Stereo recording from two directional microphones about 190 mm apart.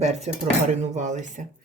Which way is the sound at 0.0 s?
35° right (ahead or behind).